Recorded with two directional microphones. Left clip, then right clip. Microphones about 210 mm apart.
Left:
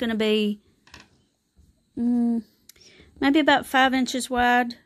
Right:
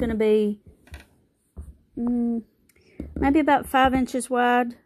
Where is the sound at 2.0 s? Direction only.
30° left (ahead or behind); by 4.8 s 10° left (ahead or behind).